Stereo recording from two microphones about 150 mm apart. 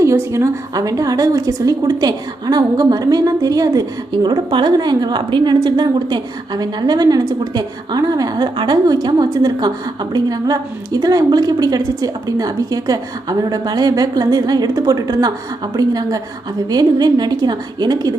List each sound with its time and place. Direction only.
0.0 s a woman's voice: 20° right (ahead or behind)